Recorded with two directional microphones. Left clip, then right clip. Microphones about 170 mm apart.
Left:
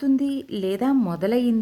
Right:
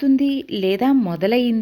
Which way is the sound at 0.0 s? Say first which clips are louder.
Right 5 dB; 5° right (ahead or behind).